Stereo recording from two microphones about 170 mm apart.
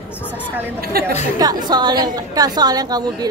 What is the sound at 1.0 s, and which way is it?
Speech, 60° right (ahead or behind).